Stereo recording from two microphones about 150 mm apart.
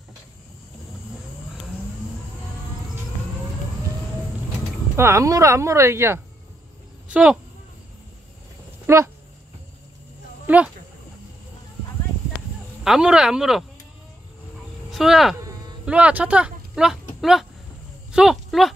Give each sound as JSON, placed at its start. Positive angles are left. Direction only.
{"t": 4.9, "sound": "speech", "side_deg": -20}
{"t": 8.8, "sound": "speech", "side_deg": -15}
{"t": 10.4, "sound": "speech", "side_deg": -10}
{"t": 12.8, "sound": "speech", "side_deg": -5}
{"t": 14.9, "sound": "speech", "side_deg": 0}